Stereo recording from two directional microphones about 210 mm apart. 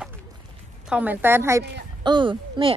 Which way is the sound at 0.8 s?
5° right (ahead or behind).